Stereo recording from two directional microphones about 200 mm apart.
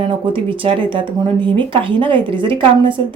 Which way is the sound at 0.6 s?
25° right (ahead or behind).